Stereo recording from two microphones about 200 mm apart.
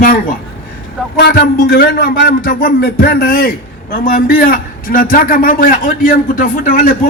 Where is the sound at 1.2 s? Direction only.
50° left (ahead or behind).